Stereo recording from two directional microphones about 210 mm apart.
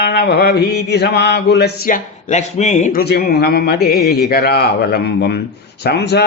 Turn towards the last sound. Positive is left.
turn(degrees=50)  # may be behind; listen again after turning